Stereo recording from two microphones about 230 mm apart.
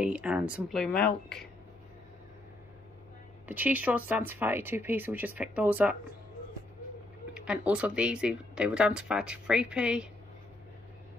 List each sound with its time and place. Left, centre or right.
0.0 s speech: centre
3.4 s speech: centre
7.3 s speech: centre